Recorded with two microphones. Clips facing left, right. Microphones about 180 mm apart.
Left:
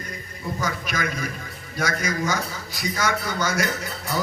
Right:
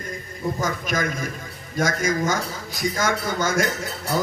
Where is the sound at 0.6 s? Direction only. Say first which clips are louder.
Right 1 dB; 45° right (ahead or behind).